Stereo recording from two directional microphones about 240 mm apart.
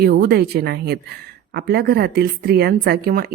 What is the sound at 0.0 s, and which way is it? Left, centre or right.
Speech, right.